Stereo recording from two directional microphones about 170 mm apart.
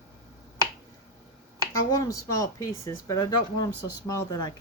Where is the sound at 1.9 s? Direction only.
20° left (ahead or behind).